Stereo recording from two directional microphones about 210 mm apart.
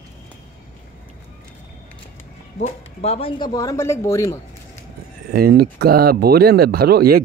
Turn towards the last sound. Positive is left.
turn(degrees=-45)  # may be behind; listen again after turning